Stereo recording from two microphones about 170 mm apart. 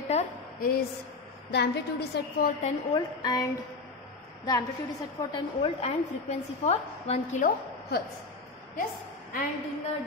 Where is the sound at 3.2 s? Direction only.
20° left (ahead or behind).